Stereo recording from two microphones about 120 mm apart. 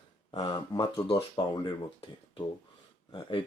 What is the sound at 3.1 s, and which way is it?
Speech, 45° left (ahead or behind).